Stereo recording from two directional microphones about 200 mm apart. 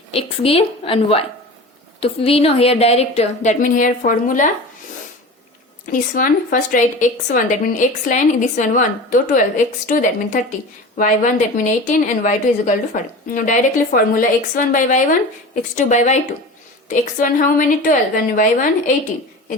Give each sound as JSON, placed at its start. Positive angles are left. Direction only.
{"t": 0.1, "sound": "a woman's voice", "side_deg": 30}
{"t": 5.9, "sound": "a woman's voice", "side_deg": 40}